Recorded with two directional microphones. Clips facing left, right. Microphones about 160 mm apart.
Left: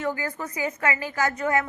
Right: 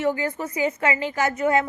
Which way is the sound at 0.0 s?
20° right (ahead or behind).